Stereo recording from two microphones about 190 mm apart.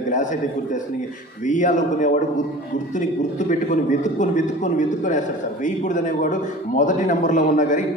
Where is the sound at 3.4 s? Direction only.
40° left (ahead or behind).